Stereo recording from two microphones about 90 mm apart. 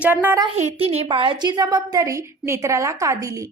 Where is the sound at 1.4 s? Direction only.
50° right (ahead or behind).